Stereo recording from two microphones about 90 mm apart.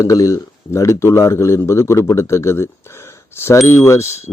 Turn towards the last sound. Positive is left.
turn(degrees=30)  # may be behind; listen again after turning